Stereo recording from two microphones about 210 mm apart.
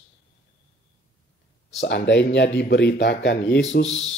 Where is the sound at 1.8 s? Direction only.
55° left (ahead or behind).